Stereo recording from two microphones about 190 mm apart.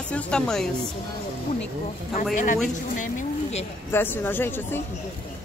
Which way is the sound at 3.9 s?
10° left (ahead or behind).